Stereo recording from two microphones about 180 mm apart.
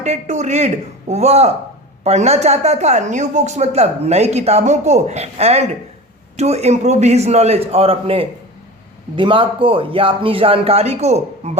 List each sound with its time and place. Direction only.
0.0 s speech: 40° right (ahead or behind)